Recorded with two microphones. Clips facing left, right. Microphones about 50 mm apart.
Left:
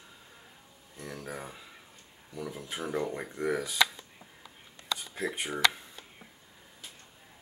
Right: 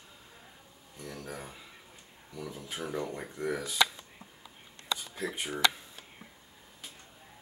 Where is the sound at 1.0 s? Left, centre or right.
Centre.